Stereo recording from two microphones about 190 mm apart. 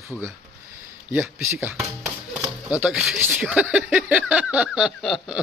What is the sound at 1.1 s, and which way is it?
Speech, 10° right (ahead or behind).